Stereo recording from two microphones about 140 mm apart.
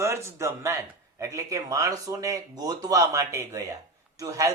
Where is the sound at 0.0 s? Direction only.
20° right (ahead or behind).